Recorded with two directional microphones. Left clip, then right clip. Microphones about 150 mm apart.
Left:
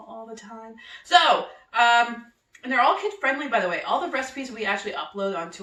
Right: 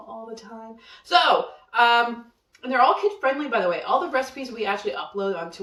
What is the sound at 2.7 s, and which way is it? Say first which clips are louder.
Speech: right 2 dB; 15° right (ahead or behind).